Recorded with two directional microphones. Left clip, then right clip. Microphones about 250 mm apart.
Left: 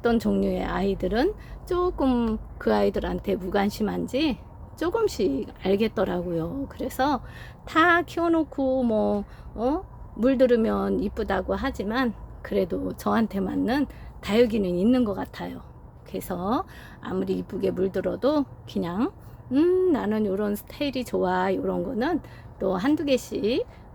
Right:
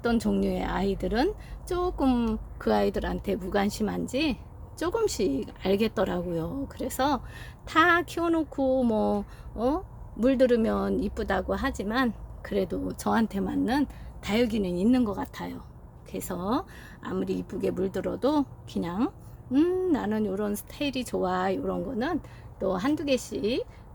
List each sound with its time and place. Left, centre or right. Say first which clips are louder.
0.0 s a woman's voice: left 3 dB; centre